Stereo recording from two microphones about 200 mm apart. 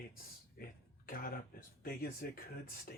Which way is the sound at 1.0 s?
45° left (ahead or behind).